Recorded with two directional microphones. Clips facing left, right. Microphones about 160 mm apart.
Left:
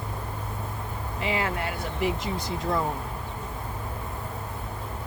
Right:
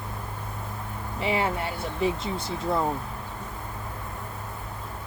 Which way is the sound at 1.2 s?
30° right (ahead or behind).